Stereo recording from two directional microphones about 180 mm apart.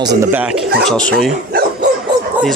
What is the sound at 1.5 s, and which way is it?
Dog, 55° right (ahead or behind).